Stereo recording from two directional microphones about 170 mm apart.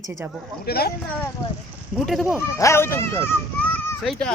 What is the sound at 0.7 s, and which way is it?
Speech, 65° left (ahead or behind).